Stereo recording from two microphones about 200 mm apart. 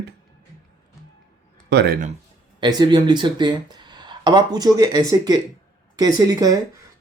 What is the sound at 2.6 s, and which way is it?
Speech, 20° right (ahead or behind).